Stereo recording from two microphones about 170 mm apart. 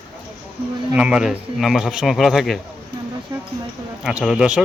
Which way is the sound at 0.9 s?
5° right (ahead or behind).